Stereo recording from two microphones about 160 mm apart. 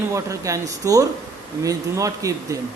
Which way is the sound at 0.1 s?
20° right (ahead or behind).